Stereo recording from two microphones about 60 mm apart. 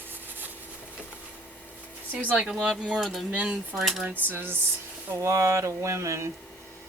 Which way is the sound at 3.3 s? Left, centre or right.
Right.